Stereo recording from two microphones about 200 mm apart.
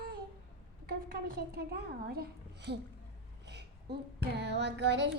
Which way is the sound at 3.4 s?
55° right (ahead or behind).